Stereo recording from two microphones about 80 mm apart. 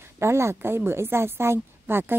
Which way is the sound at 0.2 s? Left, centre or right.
Right.